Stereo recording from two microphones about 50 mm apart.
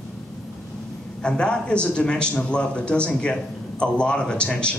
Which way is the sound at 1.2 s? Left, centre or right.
Centre.